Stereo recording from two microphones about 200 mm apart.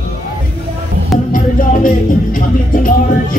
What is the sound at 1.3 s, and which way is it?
Music, 45° left (ahead or behind).